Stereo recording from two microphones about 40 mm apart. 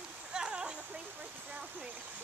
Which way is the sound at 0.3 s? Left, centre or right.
Right.